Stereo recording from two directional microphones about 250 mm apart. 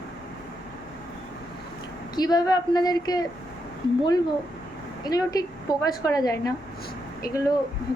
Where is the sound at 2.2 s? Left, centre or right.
Centre.